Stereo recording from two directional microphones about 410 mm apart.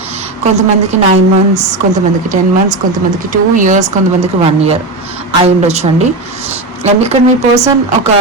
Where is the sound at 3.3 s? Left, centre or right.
Centre.